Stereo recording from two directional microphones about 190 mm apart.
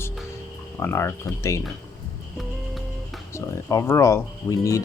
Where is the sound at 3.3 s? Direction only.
15° left (ahead or behind).